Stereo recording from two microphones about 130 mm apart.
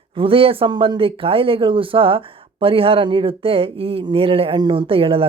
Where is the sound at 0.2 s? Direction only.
45° right (ahead or behind).